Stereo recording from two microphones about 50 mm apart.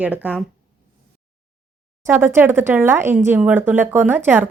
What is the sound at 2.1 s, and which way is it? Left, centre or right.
A woman's voice, right.